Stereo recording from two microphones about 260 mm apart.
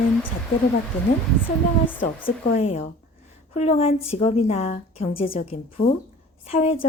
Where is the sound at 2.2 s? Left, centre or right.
Left.